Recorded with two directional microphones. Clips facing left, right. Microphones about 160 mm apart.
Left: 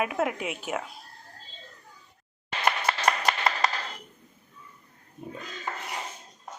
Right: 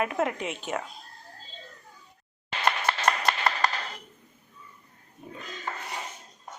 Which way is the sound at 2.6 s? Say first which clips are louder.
Even; 10° left (ahead or behind).